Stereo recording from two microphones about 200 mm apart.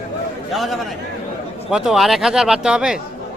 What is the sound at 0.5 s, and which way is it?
Speech, centre (ahead or behind).